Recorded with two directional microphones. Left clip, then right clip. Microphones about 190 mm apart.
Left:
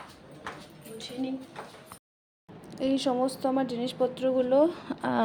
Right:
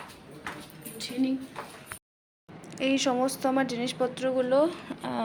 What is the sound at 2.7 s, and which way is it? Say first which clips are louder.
A woman's voice: right 1 dB; 15° left (ahead or behind).